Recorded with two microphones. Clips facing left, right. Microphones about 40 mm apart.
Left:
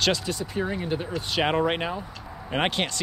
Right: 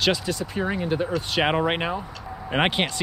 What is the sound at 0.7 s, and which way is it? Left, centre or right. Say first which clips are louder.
Speech: right 4 dB; centre.